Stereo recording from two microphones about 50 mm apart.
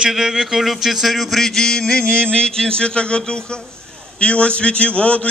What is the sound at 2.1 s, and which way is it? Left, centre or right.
Speech, centre.